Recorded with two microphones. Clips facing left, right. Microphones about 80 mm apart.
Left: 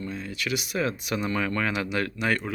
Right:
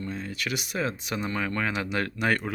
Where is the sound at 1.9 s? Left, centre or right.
Right.